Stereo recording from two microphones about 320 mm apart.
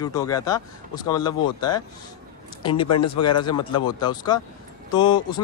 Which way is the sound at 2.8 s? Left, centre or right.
Left.